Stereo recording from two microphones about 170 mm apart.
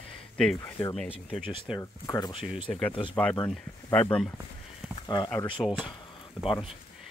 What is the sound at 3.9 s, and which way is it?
Speech, 10° left (ahead or behind).